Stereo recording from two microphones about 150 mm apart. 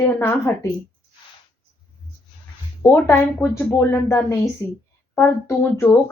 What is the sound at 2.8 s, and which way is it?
A woman's voice, 15° left (ahead or behind).